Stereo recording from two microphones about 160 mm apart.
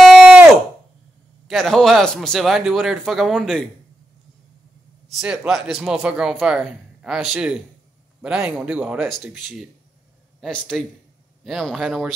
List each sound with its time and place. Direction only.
0.0 s a sound: centre (ahead or behind)
1.5 s speech: 5° left (ahead or behind)
5.1 s speech: 5° right (ahead or behind)